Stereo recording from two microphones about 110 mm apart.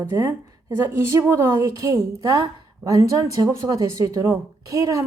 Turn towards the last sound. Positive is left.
turn(degrees=-30)  # may be behind; listen again after turning